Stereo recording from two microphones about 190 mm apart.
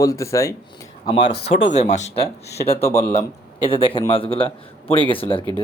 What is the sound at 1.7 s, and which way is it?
A man's voice, 40° left (ahead or behind).